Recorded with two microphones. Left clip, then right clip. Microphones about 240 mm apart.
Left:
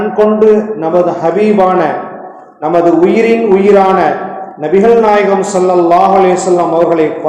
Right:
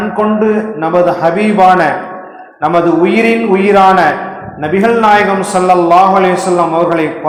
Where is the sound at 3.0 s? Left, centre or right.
Right.